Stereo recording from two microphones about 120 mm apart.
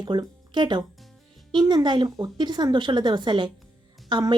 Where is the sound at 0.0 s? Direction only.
40° right (ahead or behind).